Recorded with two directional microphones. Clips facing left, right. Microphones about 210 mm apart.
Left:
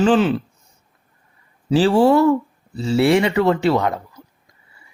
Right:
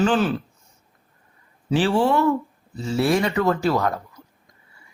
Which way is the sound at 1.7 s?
35° left (ahead or behind).